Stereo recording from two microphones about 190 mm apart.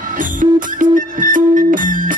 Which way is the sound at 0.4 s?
45° right (ahead or behind).